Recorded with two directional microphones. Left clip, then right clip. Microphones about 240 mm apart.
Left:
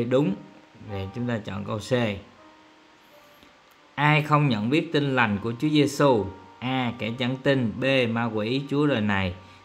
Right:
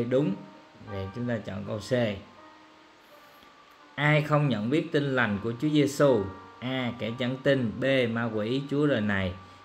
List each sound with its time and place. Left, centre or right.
0.9 s a man's voice: centre
3.9 s a man's voice: centre